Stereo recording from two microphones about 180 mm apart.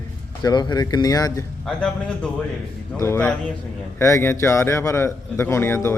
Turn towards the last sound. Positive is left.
turn(degrees=15)  # may be behind; listen again after turning